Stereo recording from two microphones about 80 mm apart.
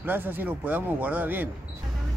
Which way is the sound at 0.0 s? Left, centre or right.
Right.